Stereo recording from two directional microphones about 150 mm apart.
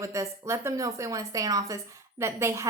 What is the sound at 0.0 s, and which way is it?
A woman's voice, 20° right (ahead or behind).